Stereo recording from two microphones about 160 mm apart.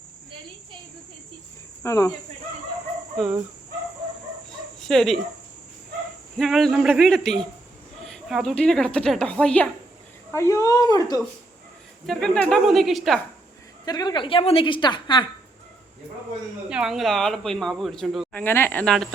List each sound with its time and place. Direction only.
1.8 s a woman's voice: 20° left (ahead or behind)
4.8 s speech: centre (ahead or behind)
6.3 s speech: centre (ahead or behind)
10.3 s a woman's voice: 20° left (ahead or behind)
12.0 s speech: 5° left (ahead or behind)
13.8 s a woman's voice: 25° left (ahead or behind)
16.6 s speech: 5° right (ahead or behind)